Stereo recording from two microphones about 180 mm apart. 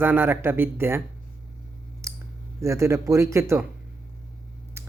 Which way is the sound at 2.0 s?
15° right (ahead or behind).